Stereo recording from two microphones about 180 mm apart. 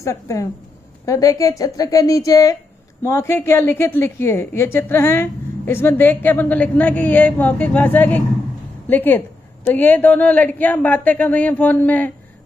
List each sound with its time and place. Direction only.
0.0 s a woman's voice: 15° left (ahead or behind)